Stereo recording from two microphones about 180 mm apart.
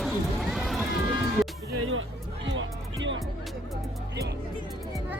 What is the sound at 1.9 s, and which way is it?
Music, 90° right.